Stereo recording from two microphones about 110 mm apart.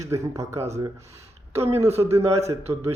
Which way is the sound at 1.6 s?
70° right (ahead or behind).